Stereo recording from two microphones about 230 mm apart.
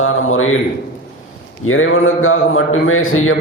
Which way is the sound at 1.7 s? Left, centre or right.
Left.